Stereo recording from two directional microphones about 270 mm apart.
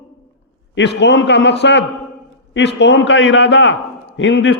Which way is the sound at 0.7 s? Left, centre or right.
Left.